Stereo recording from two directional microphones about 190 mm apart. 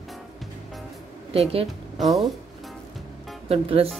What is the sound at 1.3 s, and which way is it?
Speech, 30° right (ahead or behind).